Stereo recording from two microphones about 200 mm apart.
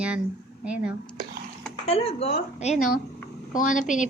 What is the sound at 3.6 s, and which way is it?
Speech, 40° left (ahead or behind).